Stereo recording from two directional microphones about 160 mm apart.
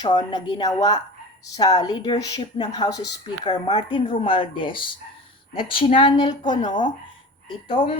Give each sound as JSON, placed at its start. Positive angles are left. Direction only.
{"t": 0.0, "sound": "speech", "side_deg": 25}